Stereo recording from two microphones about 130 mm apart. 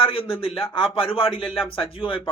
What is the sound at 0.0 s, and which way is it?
Speech, 45° left (ahead or behind).